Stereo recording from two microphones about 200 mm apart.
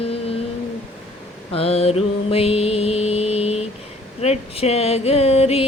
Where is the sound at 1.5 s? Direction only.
30° left (ahead or behind).